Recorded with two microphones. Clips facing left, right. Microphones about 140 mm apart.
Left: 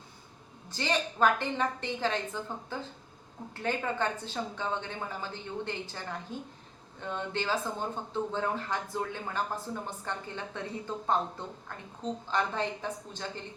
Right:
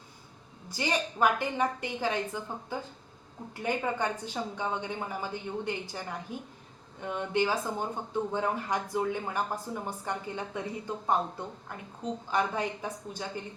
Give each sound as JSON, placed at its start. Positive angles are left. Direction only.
{"t": 0.7, "sound": "a woman's voice", "side_deg": -10}